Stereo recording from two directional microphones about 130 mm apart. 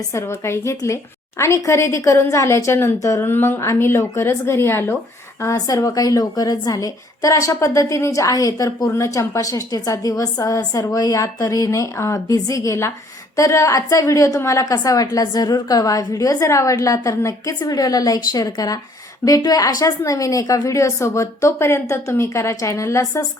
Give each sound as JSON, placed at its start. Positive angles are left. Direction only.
{"t": 0.1, "sound": "a woman's voice", "side_deg": 20}